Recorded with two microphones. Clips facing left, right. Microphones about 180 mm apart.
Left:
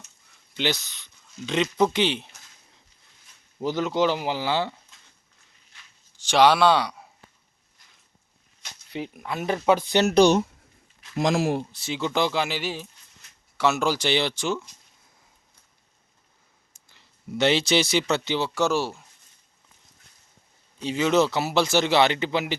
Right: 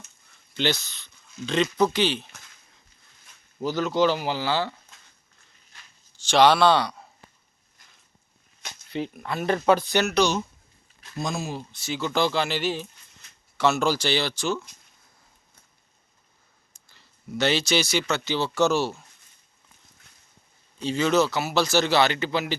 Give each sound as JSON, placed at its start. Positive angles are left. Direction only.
{"t": 0.5, "sound": "a man's voice", "side_deg": 15}
{"t": 3.6, "sound": "a man's voice", "side_deg": 20}
{"t": 6.2, "sound": "speech", "side_deg": 10}
{"t": 8.9, "sound": "speech", "side_deg": 10}
{"t": 9.9, "sound": "a man's voice", "side_deg": 30}
{"t": 10.2, "sound": "speech", "side_deg": 55}
{"t": 11.1, "sound": "speech", "side_deg": 90}
{"t": 11.9, "sound": "a man's voice", "side_deg": 20}
{"t": 16.9, "sound": "speech", "side_deg": 25}
{"t": 18.3, "sound": "speech", "side_deg": 10}
{"t": 20.7, "sound": "a man's voice", "side_deg": 15}